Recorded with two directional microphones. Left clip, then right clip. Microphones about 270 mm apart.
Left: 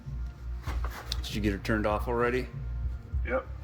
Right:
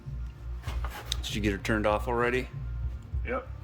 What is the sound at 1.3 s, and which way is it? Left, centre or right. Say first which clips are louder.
Speech: right 1 dB; centre.